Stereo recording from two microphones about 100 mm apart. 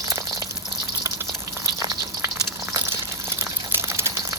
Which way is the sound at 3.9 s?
25° right (ahead or behind).